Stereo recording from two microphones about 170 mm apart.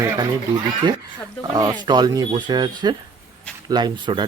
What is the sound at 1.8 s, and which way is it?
Speech, 25° right (ahead or behind).